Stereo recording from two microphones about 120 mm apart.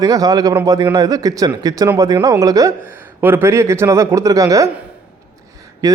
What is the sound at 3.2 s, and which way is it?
A man's voice, 20° right (ahead or behind).